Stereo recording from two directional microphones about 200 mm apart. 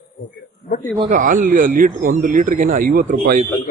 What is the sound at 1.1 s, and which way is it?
Speech, 40° right (ahead or behind).